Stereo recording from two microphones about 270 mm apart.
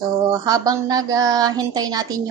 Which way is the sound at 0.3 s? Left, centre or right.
Centre.